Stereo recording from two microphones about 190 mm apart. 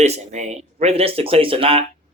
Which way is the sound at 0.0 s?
35° right (ahead or behind).